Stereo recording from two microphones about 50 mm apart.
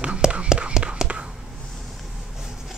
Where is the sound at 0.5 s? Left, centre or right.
Right.